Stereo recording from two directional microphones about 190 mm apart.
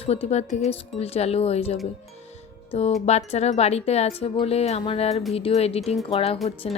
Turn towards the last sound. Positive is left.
turn(degrees=35)  # may be behind; listen again after turning